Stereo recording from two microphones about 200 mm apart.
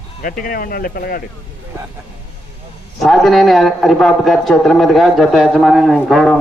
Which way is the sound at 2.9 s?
Centre (ahead or behind).